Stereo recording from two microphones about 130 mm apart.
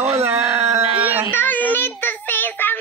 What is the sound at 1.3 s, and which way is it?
Child singing, 15° left (ahead or behind).